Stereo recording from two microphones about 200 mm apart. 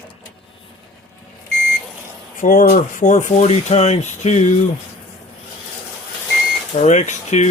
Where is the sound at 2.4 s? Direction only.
40° left (ahead or behind).